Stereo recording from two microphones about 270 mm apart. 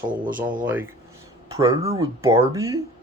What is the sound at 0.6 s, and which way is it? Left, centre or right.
Speech, centre.